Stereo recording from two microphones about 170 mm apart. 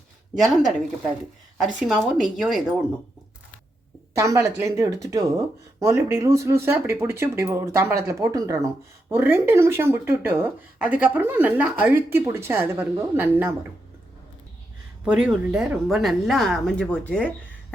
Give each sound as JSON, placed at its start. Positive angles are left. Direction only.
{"t": 0.3, "sound": "speech", "side_deg": 0}
{"t": 4.2, "sound": "speech", "side_deg": -15}
{"t": 15.0, "sound": "speech", "side_deg": -5}